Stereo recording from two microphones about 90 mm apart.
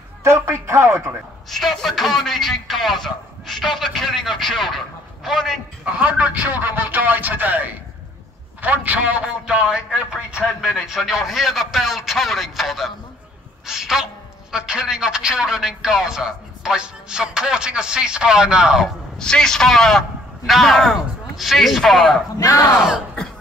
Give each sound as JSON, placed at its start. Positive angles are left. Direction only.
{"t": 0.2, "sound": "a man's voice", "side_deg": -30}
{"t": 1.5, "sound": "a man's voice", "side_deg": 5}
{"t": 5.9, "sound": "a man's voice", "side_deg": -15}
{"t": 19.1, "sound": "a man's voice", "side_deg": 10}
{"t": 22.4, "sound": "speech", "side_deg": 40}